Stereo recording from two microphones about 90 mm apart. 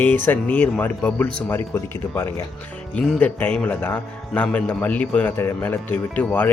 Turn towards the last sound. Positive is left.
turn(degrees=15)  # may be behind; listen again after turning